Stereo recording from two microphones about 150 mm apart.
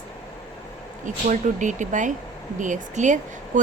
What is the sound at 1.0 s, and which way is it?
A woman's voice, 55° right (ahead or behind).